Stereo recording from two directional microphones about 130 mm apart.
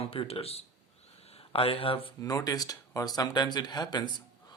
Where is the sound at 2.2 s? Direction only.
30° left (ahead or behind).